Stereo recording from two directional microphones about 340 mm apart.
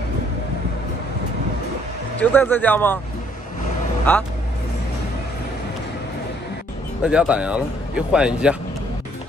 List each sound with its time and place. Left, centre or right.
2.1 s speech: centre
7.0 s speech: centre